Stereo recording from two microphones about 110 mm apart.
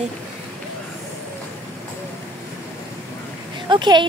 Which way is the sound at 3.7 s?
45° right (ahead or behind).